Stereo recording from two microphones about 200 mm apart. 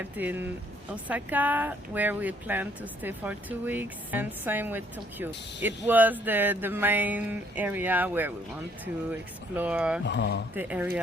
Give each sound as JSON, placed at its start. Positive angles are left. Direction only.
{"t": 0.0, "sound": "speech", "side_deg": -10}
{"t": 9.6, "sound": "speech", "side_deg": -5}
{"t": 10.1, "sound": "speech", "side_deg": 60}
{"t": 10.5, "sound": "speech", "side_deg": -10}